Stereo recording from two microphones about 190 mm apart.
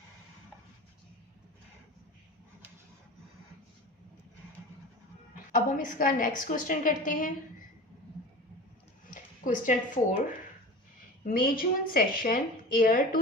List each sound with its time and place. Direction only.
5.5 s a woman's voice: 45° left (ahead or behind)
9.0 s speech: 45° left (ahead or behind)
11.3 s a woman's voice: 45° left (ahead or behind)